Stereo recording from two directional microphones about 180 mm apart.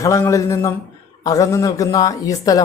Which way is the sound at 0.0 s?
15° left (ahead or behind).